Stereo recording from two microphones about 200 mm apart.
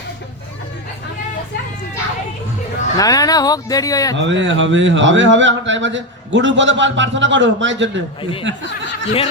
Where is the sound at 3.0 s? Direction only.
20° left (ahead or behind).